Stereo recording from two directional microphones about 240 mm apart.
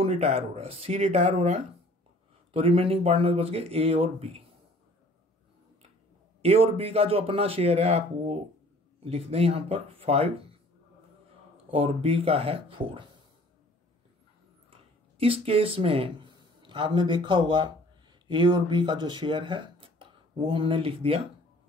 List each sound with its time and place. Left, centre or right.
0.0 s speech: right
6.4 s speech: right
11.7 s speech: right
15.1 s speech: right